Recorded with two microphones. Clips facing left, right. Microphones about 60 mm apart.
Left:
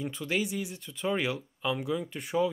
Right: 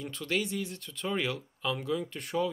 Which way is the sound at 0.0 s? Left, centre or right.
Centre.